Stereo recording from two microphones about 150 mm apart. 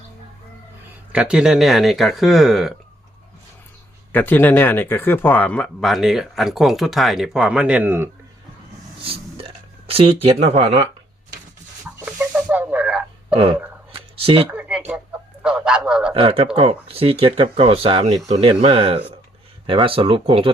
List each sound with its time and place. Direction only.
1.1 s speech: 5° right (ahead or behind)
4.1 s speech: 10° left (ahead or behind); by 8.1 s 15° right (ahead or behind)
9.0 s speech: 40° right (ahead or behind)
11.9 s a sound: 10° right (ahead or behind)
13.3 s speech: 40° right (ahead or behind)
13.9 s a sound: 40° right (ahead or behind)
14.5 s speech: 10° right (ahead or behind)
16.1 s speech: 40° right (ahead or behind)